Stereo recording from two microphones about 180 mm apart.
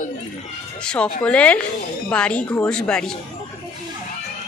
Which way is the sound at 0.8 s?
5° left (ahead or behind).